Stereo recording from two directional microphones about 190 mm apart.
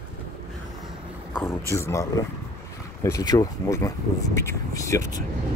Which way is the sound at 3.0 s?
20° left (ahead or behind).